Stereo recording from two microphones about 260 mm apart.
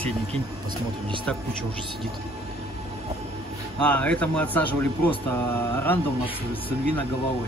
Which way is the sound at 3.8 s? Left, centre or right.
Centre.